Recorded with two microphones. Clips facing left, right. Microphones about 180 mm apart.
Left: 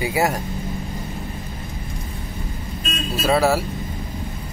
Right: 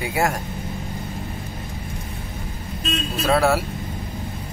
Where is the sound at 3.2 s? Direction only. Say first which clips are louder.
Left 1 dB; centre (ahead or behind).